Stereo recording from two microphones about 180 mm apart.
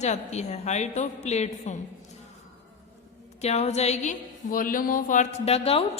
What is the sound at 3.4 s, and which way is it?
A woman's voice, 35° left (ahead or behind).